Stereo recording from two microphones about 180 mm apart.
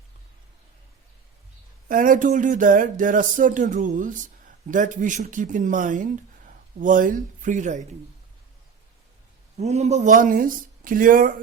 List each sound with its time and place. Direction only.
1.9 s speech: 50° right (ahead or behind)
9.6 s speech: 35° right (ahead or behind)